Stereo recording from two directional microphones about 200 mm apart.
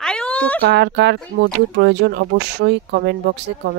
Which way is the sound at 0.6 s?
55° right (ahead or behind).